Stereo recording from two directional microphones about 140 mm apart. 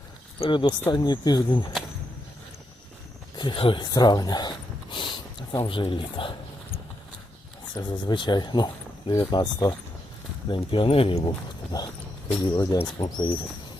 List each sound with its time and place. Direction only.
0.3 s speech: 40° left (ahead or behind)
3.3 s speech: 35° left (ahead or behind)
7.8 s speech: 35° left (ahead or behind)
11.7 s speech: 25° left (ahead or behind)